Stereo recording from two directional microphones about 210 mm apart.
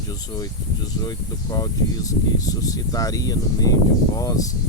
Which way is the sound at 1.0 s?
20° left (ahead or behind).